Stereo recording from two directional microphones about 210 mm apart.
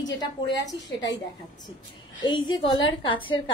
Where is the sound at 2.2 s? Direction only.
20° left (ahead or behind).